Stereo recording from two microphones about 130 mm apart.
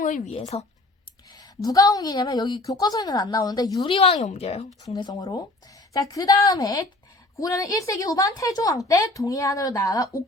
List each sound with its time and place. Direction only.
0.0 s speech: 75° left (ahead or behind)
1.4 s a woman's voice: 30° left (ahead or behind)
3.8 s speech: 45° left (ahead or behind)
4.2 s speech: 60° left (ahead or behind)
4.9 s a woman's voice: 35° left (ahead or behind)